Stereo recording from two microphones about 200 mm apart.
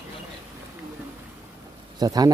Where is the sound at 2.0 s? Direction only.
20° right (ahead or behind).